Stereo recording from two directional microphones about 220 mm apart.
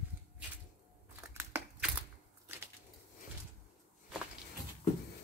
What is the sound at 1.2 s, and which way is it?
Crushing, 10° right (ahead or behind).